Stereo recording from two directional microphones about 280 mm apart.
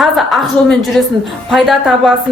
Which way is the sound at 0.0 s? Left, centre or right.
Centre.